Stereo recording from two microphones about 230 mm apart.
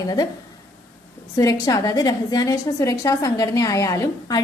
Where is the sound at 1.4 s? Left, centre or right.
Centre.